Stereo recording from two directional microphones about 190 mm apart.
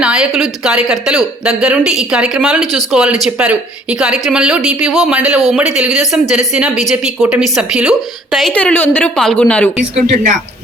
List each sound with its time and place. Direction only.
0.0 s a woman's voice: 5° right (ahead or behind)
9.9 s speech: 35° right (ahead or behind)